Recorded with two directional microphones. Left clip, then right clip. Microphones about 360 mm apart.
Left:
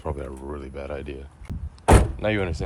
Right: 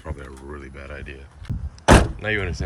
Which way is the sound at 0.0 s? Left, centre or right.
Centre.